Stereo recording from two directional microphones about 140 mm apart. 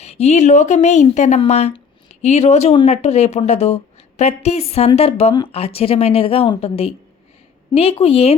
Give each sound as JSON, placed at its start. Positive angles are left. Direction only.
{"t": 0.0, "sound": "a woman's voice", "side_deg": 50}